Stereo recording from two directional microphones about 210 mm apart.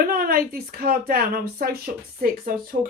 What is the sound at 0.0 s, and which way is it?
A woman's voice, 45° right (ahead or behind).